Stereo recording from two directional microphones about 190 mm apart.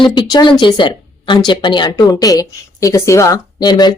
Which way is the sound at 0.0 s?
25° left (ahead or behind).